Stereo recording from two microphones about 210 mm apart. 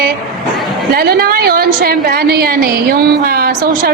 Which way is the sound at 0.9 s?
45° right (ahead or behind).